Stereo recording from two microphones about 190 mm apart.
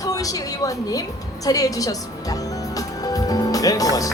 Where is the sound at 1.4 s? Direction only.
20° left (ahead or behind).